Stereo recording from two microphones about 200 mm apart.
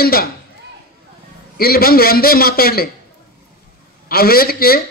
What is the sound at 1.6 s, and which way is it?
A man's voice, 50° left (ahead or behind).